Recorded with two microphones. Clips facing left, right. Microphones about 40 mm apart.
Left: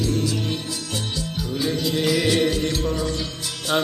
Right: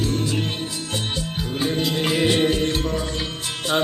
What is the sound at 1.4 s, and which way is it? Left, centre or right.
Music, right.